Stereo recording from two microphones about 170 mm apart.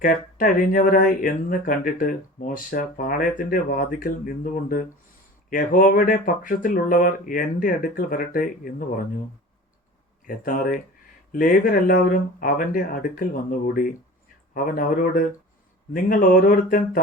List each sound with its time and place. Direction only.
0.0 s speech: 55° left (ahead or behind)
10.2 s speech: 55° left (ahead or behind)